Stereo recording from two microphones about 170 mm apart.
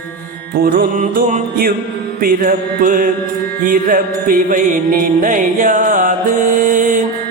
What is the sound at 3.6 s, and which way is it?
Music, 55° right (ahead or behind).